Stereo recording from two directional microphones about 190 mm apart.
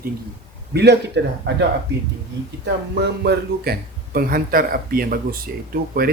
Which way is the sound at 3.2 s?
60° right (ahead or behind).